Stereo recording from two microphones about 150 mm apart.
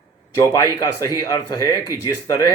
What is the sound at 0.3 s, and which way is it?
Speech, 20° left (ahead or behind).